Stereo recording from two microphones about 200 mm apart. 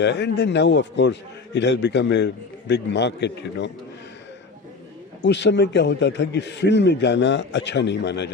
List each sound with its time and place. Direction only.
0.0 s a man's voice: 60° left (ahead or behind)
5.2 s a man's voice: 60° left (ahead or behind)